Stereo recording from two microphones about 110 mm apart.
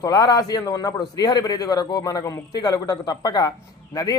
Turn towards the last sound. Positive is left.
turn(degrees=35)  # may be behind; listen again after turning